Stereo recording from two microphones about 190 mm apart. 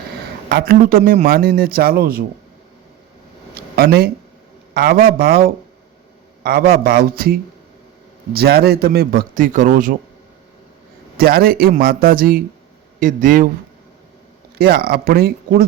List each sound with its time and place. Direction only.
0.5 s a man's voice: 50° right (ahead or behind)
3.5 s a sound: 55° right (ahead or behind)
4.7 s a man's voice: 55° right (ahead or behind)
11.2 s a man's voice: 50° right (ahead or behind)
14.6 s a man's voice: 55° right (ahead or behind)